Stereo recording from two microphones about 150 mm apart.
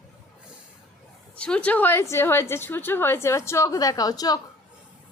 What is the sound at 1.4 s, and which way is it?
A woman's voice, 10° left (ahead or behind).